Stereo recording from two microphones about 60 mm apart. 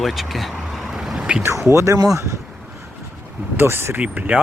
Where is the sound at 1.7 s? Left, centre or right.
Right.